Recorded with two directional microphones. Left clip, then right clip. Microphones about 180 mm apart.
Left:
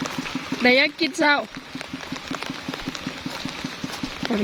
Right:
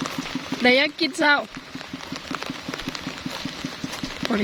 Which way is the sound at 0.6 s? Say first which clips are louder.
Left 1 dB; centre (ahead or behind).